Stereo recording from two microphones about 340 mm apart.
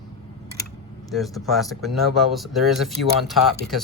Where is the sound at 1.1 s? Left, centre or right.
Centre.